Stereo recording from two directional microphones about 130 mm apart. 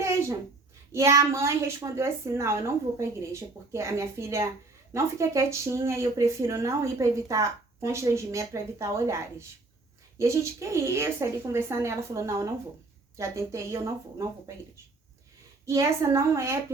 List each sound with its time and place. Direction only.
0.0 s a sound: 20° right (ahead or behind)
0.9 s speech: 20° right (ahead or behind)
15.6 s speech: 25° right (ahead or behind)